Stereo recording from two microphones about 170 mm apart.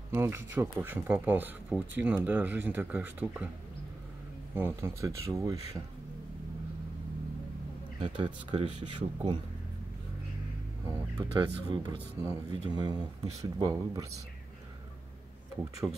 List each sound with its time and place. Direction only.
0.1 s speech: 15° right (ahead or behind)
4.6 s speech: 15° right (ahead or behind)
8.0 s speech: 30° right (ahead or behind)
11.3 s speech: 25° right (ahead or behind)
15.5 s speech: 20° right (ahead or behind)